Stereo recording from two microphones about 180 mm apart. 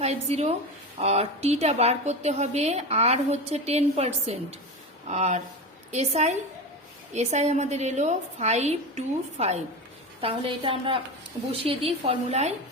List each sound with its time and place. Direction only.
0.0 s a woman's voice: 35° right (ahead or behind)